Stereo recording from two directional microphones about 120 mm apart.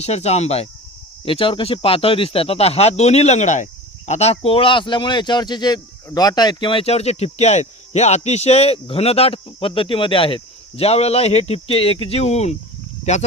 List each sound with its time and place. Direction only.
0.0 s speech: 65° left (ahead or behind)
1.2 s speech: 50° left (ahead or behind); by 13.2 s 65° left (ahead or behind)